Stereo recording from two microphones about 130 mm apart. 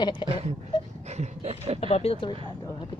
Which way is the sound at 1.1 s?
60° right (ahead or behind).